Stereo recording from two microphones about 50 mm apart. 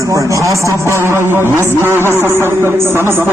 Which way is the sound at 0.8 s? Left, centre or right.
Right.